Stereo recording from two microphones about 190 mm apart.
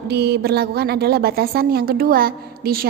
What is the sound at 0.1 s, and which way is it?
A woman's voice, 60° right (ahead or behind).